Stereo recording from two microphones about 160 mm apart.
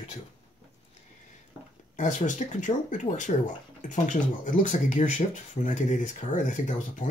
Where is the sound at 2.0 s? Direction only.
50° left (ahead or behind).